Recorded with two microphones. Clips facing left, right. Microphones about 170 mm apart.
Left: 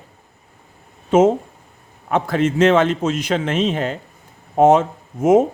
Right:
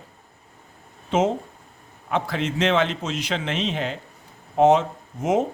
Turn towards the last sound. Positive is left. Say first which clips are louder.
# left 8 dB
turn(degrees=50)  # may be behind; listen again after turning